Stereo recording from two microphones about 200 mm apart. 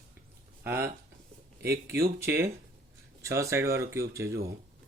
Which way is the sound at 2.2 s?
15° right (ahead or behind).